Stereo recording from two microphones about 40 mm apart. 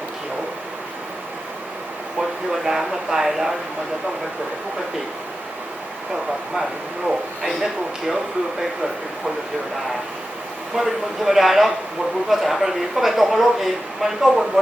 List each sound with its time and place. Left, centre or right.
2.5 s speech: centre
7.4 s speech: centre
10.8 s speech: centre